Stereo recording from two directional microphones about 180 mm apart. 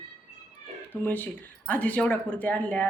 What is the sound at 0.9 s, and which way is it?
A woman's voice, 10° left (ahead or behind).